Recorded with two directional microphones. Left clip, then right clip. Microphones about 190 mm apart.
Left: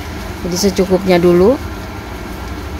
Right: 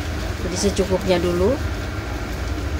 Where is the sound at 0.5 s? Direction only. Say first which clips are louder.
Left 7 dB; 35° left (ahead or behind).